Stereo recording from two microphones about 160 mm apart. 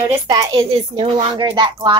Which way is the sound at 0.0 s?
25° right (ahead or behind).